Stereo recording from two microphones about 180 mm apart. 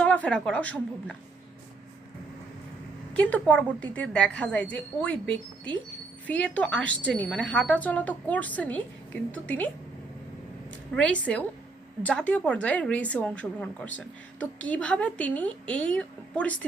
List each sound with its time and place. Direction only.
0.0 s a woman's voice: 5° left (ahead or behind)
3.2 s a woman's voice: 5° left (ahead or behind)
10.9 s a woman's voice: 5° left (ahead or behind)